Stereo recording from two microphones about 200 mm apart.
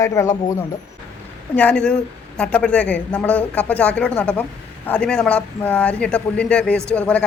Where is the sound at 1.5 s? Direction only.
5° left (ahead or behind).